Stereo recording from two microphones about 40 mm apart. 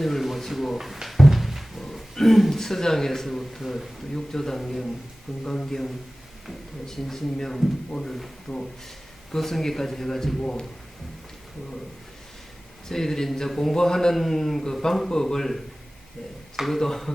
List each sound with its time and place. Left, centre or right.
0.0 s a sound: centre
1.0 s speech: centre
4.1 s a man's voice: centre
12.9 s a man's voice: centre